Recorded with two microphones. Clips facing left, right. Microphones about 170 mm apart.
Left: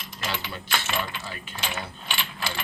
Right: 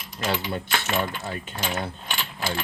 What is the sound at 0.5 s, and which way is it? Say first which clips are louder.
Speech: right 4 dB; 50° right (ahead or behind).